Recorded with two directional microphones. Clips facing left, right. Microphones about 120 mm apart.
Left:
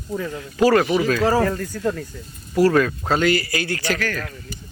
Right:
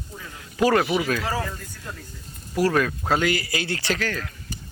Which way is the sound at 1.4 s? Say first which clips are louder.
Left 13 dB; 80° left.